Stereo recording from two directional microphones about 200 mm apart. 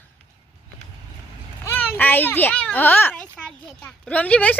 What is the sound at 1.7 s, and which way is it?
A child's voice, 10° left (ahead or behind).